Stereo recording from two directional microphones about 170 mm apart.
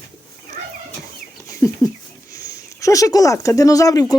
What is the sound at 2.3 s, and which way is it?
Speech, 20° left (ahead or behind).